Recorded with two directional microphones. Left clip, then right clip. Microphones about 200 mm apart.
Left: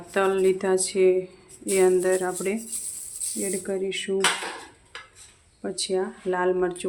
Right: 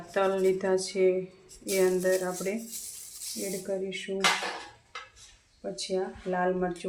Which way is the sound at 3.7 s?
45° left (ahead or behind).